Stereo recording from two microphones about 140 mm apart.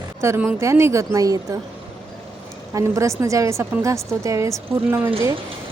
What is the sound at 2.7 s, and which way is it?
A woman's voice, 20° right (ahead or behind).